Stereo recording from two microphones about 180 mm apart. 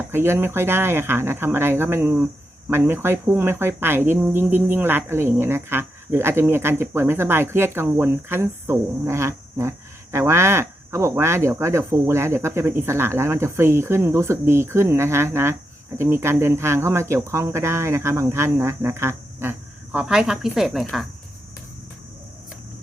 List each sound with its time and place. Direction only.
0.1 s speech: 15° right (ahead or behind)